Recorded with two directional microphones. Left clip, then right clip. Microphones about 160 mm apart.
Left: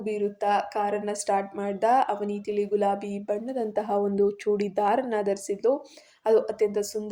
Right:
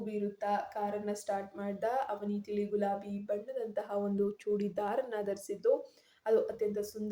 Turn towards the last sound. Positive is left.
turn(degrees=30)  # may be behind; listen again after turning